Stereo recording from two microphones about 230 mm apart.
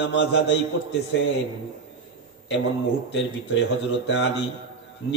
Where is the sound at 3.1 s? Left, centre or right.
Left.